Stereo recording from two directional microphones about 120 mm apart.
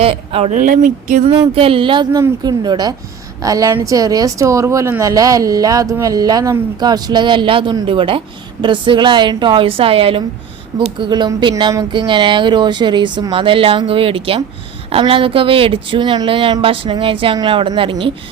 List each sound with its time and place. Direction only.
0.0 s speech: 50° right (ahead or behind)
0.5 s speech: 90° right
1.3 s a woman's voice: 50° right (ahead or behind)